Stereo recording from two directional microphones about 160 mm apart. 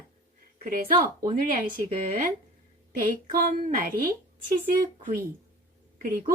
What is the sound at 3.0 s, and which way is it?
Speech, 60° right (ahead or behind).